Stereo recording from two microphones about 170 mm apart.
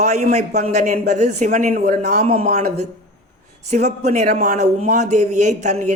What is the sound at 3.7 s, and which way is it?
Speech, 40° right (ahead or behind).